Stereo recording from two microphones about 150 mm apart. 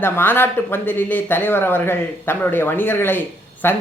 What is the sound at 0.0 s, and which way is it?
Speech, 15° left (ahead or behind).